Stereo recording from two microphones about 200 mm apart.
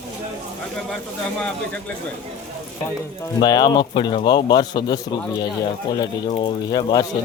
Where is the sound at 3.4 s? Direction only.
20° left (ahead or behind).